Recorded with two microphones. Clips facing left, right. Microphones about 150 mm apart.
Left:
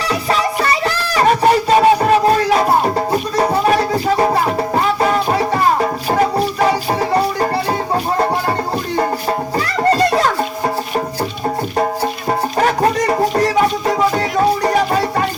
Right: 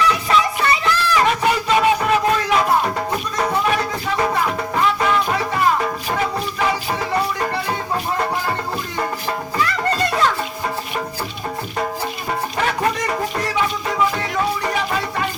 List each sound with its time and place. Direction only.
0.0 s music: 35° left (ahead or behind)
9.6 s music: 35° left (ahead or behind)
12.3 s music: 40° left (ahead or behind)